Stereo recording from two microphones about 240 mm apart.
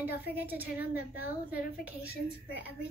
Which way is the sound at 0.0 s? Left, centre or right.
Centre.